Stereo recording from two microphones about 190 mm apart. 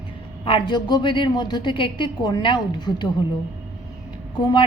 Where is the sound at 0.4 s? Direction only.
25° left (ahead or behind).